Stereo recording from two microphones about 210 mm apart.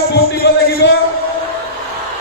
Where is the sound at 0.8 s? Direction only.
55° left (ahead or behind).